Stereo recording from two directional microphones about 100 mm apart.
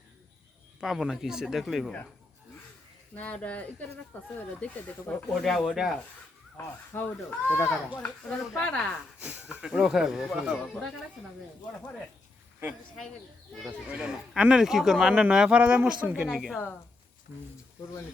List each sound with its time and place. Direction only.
0.8 s speech: 5° right (ahead or behind)
3.2 s speech: 15° left (ahead or behind)
5.3 s speech: 5° left (ahead or behind)
6.9 s speech: 15° left (ahead or behind)
9.2 s speech: 15° right (ahead or behind)
13.7 s speech: 10° right (ahead or behind)